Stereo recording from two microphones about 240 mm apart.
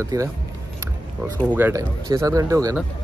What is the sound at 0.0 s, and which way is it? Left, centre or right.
Speech, centre.